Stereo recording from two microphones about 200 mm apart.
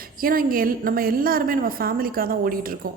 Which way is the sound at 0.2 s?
45° right (ahead or behind).